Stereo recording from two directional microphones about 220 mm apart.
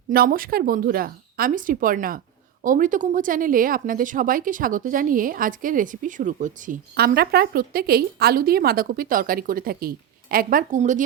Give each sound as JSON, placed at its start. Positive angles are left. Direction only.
{"t": 0.1, "sound": "speech", "side_deg": -40}